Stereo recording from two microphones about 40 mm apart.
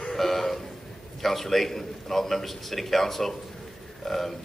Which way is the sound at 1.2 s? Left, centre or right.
Centre.